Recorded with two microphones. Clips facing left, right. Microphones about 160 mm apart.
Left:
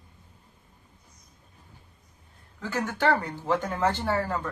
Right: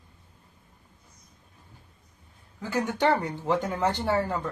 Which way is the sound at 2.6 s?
15° right (ahead or behind).